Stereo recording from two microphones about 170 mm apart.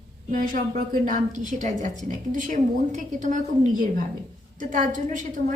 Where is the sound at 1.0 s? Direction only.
50° right (ahead or behind).